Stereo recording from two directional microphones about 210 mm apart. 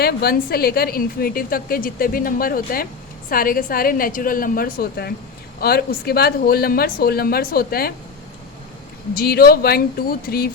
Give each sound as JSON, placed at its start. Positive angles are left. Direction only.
{"t": 0.0, "sound": "a woman's voice", "side_deg": 45}
{"t": 9.1, "sound": "a woman's voice", "side_deg": 45}